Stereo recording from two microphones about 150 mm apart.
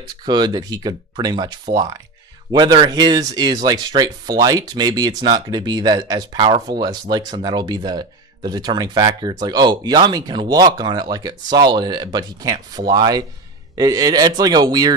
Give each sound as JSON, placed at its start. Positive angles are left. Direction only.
{"t": 0.2, "sound": "speech", "side_deg": -30}